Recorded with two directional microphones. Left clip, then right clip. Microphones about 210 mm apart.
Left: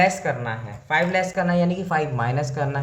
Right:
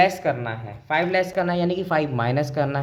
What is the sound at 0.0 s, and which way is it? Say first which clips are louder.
A woman's voice: right 1 dB; 35° right (ahead or behind).